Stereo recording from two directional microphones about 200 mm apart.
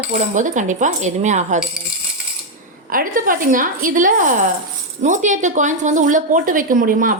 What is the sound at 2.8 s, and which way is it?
A woman's voice, 45° right (ahead or behind).